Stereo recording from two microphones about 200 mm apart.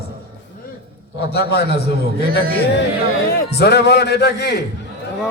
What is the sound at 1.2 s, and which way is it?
Speech, 55° left (ahead or behind).